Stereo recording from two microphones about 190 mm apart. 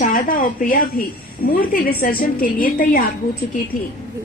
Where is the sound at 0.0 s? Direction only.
45° left (ahead or behind).